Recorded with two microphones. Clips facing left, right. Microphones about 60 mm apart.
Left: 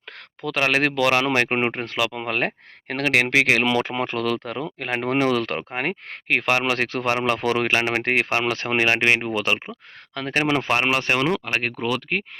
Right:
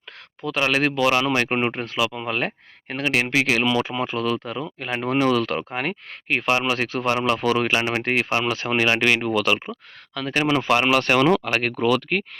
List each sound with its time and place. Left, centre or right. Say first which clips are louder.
0.4 s speech: even; left
1.4 s speech: left 1 dB; left
10.2 s speech: even; left
10.6 s speech: right 3 dB; left
11.0 s speech: right 4 dB; centre